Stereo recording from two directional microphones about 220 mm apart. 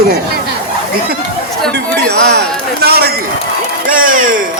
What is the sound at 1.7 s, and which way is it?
A man's voice, 50° right (ahead or behind).